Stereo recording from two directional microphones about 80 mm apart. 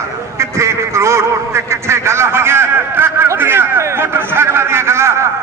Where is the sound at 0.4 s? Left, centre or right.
Right.